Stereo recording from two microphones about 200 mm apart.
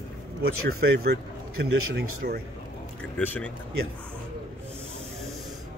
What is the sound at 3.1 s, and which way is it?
Speech, 5° left (ahead or behind).